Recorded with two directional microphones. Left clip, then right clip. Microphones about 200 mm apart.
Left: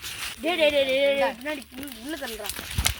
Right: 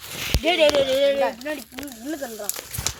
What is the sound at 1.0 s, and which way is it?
Speech, 20° right (ahead or behind).